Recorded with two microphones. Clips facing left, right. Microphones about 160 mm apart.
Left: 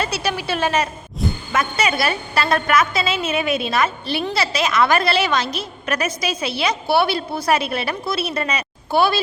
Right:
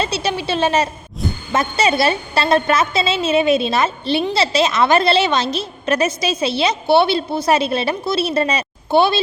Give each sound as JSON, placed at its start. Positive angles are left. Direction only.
{"t": 0.0, "sound": "a woman's voice", "side_deg": -25}